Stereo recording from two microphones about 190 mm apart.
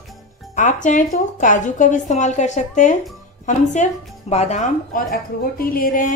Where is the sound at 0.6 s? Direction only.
40° left (ahead or behind).